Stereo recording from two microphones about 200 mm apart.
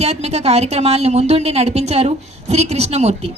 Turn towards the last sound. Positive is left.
turn(degrees=-30)  # may be behind; listen again after turning